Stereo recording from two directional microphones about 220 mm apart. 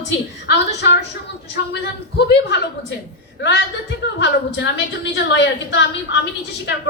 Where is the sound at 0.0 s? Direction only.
50° left (ahead or behind).